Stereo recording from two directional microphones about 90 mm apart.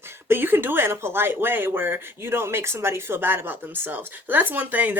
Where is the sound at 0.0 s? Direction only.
25° right (ahead or behind).